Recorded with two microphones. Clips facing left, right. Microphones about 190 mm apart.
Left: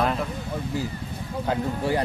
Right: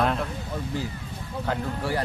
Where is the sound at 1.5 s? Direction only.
15° left (ahead or behind).